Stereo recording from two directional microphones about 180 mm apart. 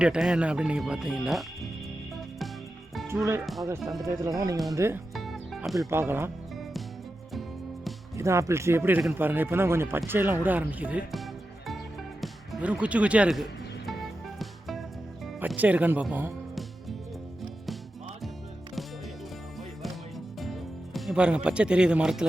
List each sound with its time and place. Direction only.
0.0 s speech: 5° right (ahead or behind)
3.4 s speech: centre (ahead or behind)
4.0 s speech: 20° right (ahead or behind)
5.1 s music: centre (ahead or behind)
5.9 s speech: 15° right (ahead or behind)
8.1 s speech: 15° right (ahead or behind); by 11.8 s centre (ahead or behind)
12.2 s music: 5° right (ahead or behind)
15.4 s speech: 10° right (ahead or behind)
20.4 s music: centre (ahead or behind)